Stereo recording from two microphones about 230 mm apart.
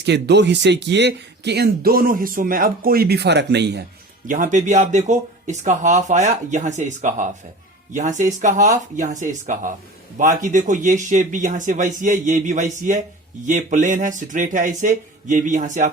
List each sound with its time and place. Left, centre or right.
0.0 s speech: right
4.3 s speech: right